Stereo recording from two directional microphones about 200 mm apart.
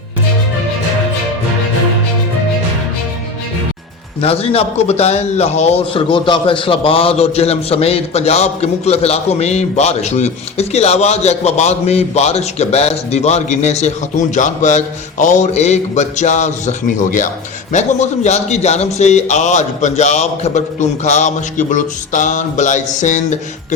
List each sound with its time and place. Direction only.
4.2 s a man's voice: 30° left (ahead or behind)